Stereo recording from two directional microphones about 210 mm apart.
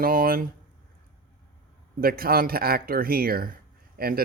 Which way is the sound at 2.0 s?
45° right (ahead or behind).